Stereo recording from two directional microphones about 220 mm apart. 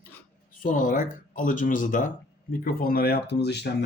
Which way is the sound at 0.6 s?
35° left (ahead or behind).